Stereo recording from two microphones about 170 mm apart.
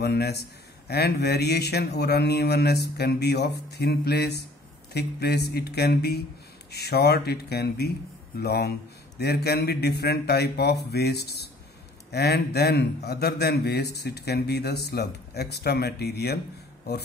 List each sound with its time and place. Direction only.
0.0 s speech: 70° left (ahead or behind)